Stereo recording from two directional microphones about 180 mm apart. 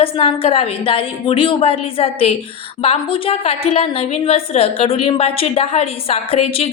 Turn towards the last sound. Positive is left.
turn(degrees=35)  # may be behind; listen again after turning